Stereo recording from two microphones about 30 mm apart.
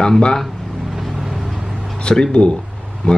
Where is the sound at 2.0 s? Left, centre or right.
Left.